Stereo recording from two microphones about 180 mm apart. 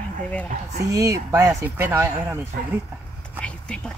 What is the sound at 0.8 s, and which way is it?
Speech, 20° right (ahead or behind).